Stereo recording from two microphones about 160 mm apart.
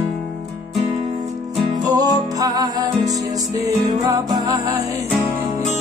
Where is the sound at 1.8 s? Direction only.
25° right (ahead or behind).